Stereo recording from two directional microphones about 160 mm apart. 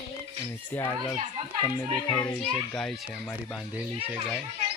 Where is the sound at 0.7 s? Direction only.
15° left (ahead or behind); by 3.8 s centre (ahead or behind).